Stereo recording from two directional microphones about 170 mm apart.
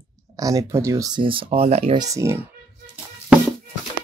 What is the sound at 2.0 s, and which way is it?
Speech, 20° right (ahead or behind).